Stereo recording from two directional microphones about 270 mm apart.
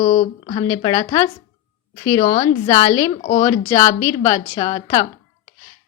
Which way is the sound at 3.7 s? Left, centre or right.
Centre.